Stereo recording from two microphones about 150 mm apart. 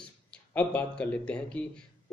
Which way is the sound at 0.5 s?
10° left (ahead or behind).